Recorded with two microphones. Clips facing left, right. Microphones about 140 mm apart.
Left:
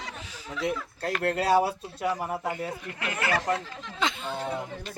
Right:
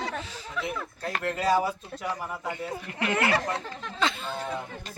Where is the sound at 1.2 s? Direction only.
65° left (ahead or behind).